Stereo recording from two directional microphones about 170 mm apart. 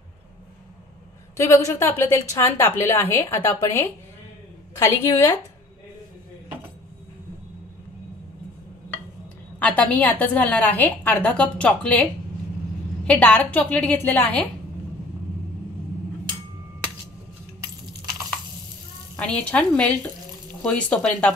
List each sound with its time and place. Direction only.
1.3 s a woman's voice: 20° left (ahead or behind)
9.6 s a woman's voice: 10° left (ahead or behind)
19.1 s a woman's voice: 5° left (ahead or behind)